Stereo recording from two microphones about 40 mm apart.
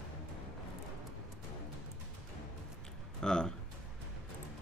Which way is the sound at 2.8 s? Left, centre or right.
Centre.